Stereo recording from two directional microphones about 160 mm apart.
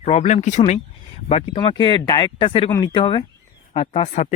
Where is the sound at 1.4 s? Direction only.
35° left (ahead or behind).